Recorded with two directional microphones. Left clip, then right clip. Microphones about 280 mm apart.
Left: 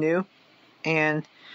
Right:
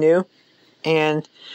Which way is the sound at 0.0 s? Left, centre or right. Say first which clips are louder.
Right 8 dB; centre.